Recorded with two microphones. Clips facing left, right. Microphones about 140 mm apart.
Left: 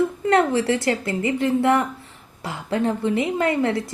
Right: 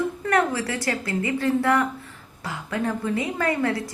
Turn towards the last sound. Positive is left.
turn(degrees=25)  # may be behind; listen again after turning